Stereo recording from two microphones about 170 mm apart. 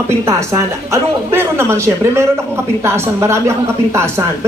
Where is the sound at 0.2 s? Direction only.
15° right (ahead or behind).